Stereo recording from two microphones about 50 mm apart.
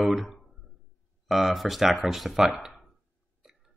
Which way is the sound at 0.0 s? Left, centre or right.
Centre.